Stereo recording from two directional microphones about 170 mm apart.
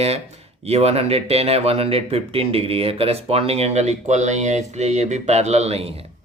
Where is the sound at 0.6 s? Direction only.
35° right (ahead or behind).